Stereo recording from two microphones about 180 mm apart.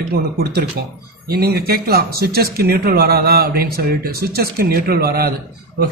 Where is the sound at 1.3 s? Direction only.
60° right (ahead or behind).